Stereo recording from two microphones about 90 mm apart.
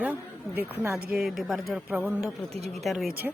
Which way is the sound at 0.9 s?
5° right (ahead or behind).